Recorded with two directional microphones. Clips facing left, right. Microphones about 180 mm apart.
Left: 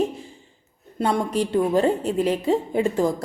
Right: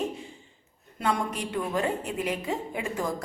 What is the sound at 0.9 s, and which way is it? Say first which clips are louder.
A woman's voice: left 7 dB; 30° left (ahead or behind).